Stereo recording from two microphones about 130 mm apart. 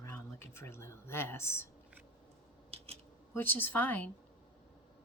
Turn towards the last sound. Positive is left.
turn(degrees=15)  # may be behind; listen again after turning